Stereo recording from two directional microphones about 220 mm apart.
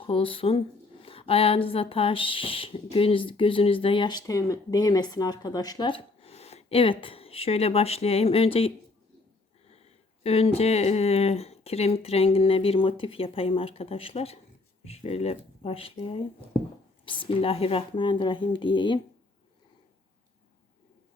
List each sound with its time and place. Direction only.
0.0 s a woman's voice: 25° left (ahead or behind)
10.2 s a woman's voice: 25° left (ahead or behind)